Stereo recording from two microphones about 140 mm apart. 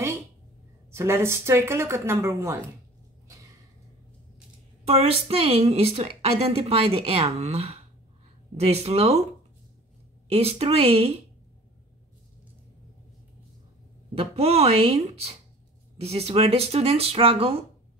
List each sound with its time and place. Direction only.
0.9 s speech: 20° right (ahead or behind)
4.8 s a woman's voice: 45° right (ahead or behind)
10.3 s a woman's voice: 45° right (ahead or behind)
14.1 s a woman's voice: 45° right (ahead or behind)